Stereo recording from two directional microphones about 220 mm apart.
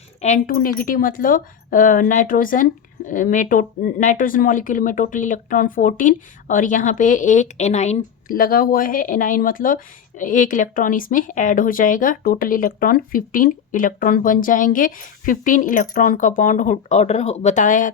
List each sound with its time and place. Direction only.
0.2 s speech: 35° left (ahead or behind)